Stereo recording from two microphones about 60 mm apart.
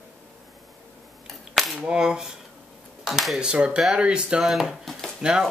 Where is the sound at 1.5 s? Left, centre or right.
Centre.